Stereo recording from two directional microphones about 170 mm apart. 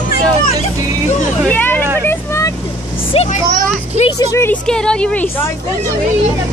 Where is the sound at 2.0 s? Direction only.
15° left (ahead or behind).